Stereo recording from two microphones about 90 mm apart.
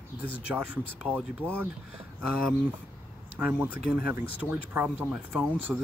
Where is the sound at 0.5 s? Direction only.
15° right (ahead or behind).